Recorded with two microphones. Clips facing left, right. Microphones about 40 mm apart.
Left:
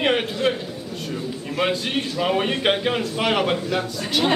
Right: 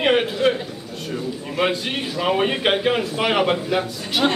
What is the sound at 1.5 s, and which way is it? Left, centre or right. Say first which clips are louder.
A man's voice: even; centre.